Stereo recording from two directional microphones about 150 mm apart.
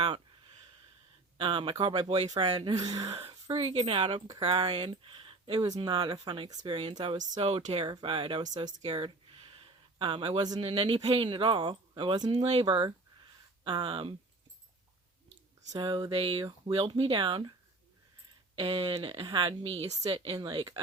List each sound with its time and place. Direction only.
1.4 s speech: 35° right (ahead or behind)
2.2 s speech: 30° right (ahead or behind)
3.1 s speech: 40° right (ahead or behind)
7.4 s speech: 40° right (ahead or behind)
15.7 s speech: 30° right (ahead or behind)
18.5 s speech: 35° right (ahead or behind)